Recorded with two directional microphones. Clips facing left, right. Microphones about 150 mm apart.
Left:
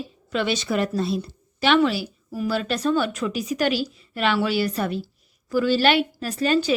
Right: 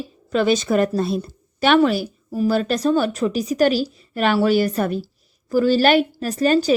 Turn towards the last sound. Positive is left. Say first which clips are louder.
# right 4 dB
turn(degrees=-40)  # may be behind; listen again after turning